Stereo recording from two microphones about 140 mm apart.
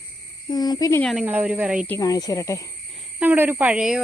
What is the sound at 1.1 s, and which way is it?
Speech, 10° right (ahead or behind).